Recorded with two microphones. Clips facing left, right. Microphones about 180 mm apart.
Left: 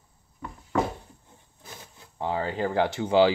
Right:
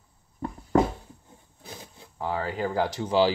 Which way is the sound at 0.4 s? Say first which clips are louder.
Right 7 dB; 40° right (ahead or behind).